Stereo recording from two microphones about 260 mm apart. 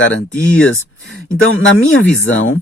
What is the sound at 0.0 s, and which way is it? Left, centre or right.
Speech, left.